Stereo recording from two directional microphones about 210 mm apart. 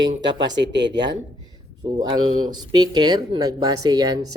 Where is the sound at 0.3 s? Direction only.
55° right (ahead or behind).